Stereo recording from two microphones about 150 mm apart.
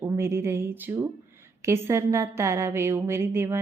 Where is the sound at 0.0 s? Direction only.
20° right (ahead or behind).